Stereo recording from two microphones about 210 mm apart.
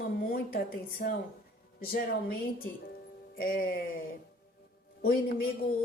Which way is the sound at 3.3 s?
45° left (ahead or behind).